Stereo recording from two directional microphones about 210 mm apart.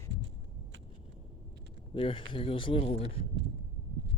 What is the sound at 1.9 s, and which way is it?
Speech, 25° left (ahead or behind).